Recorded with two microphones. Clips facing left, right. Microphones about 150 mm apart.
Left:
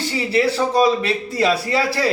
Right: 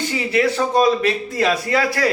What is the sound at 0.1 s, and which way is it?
A man's voice, 30° left (ahead or behind).